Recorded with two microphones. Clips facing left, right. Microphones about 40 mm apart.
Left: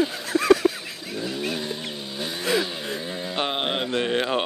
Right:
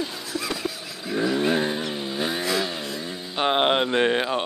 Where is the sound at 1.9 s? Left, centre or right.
Centre.